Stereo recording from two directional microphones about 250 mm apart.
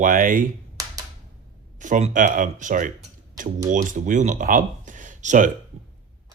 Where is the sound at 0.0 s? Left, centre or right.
Right.